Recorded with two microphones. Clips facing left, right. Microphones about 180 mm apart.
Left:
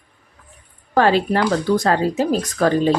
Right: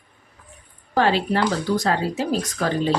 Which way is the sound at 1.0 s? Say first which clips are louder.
Left 3 dB; 50° left (ahead or behind).